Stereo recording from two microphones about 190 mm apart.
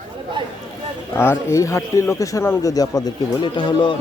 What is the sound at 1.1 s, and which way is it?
Speech, 10° left (ahead or behind).